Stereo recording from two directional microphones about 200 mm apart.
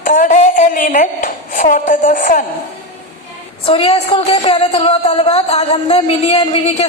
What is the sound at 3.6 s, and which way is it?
A woman's voice, 30° left (ahead or behind).